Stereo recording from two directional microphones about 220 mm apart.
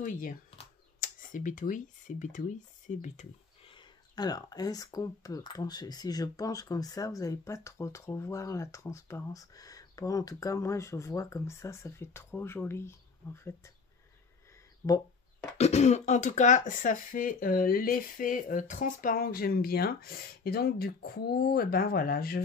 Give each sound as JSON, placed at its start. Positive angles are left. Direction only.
{"t": 0.0, "sound": "speech", "side_deg": 35}
{"t": 15.5, "sound": "speech", "side_deg": 30}